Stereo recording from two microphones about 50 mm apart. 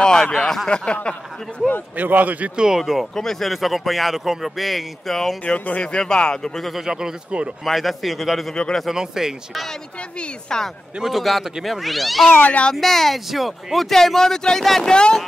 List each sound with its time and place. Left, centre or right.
0.0 s speech: centre
2.0 s speech: right
2.5 s speech: centre
3.2 s speech: centre
5.4 s speech: left
6.7 s speech: centre
7.6 s speech: centre
8.5 s speech: centre
8.8 s speech: centre
10.5 s speech: centre
11.1 s speech: centre
12.4 s a child's voice: left
12.7 s speech: centre
14.9 s speech: centre